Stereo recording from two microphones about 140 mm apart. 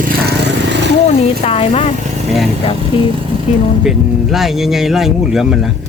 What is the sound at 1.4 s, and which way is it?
Speech, 45° left (ahead or behind).